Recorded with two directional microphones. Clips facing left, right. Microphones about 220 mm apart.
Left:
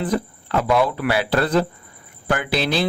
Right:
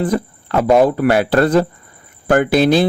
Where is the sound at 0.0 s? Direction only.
45° right (ahead or behind).